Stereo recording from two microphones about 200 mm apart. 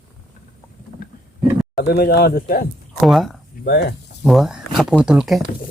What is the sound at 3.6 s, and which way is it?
Speech, 55° left (ahead or behind).